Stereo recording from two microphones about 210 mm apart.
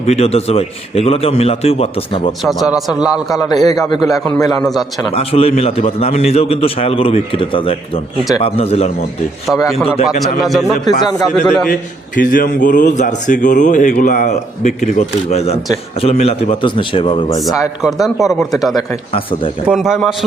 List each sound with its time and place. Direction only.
0.0 s a man's voice: 30° left (ahead or behind)
2.4 s a man's voice: centre (ahead or behind)
3.5 s a man's voice: 20° left (ahead or behind)
4.0 s a man's voice: centre (ahead or behind)
5.1 s a man's voice: 30° left (ahead or behind)
9.5 s a man's voice: centre (ahead or behind)
11.7 s a man's voice: 40° left (ahead or behind); by 17.4 s 25° left (ahead or behind)
17.4 s a man's voice: centre (ahead or behind)
19.1 s a man's voice: 25° left (ahead or behind)
19.6 s a man's voice: centre (ahead or behind)